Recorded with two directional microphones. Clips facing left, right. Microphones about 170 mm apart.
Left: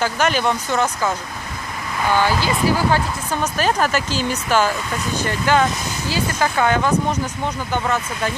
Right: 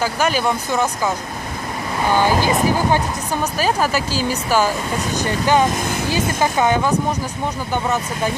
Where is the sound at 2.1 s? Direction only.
15° right (ahead or behind).